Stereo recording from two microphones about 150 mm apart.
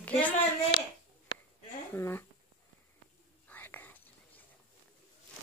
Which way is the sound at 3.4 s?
15° left (ahead or behind).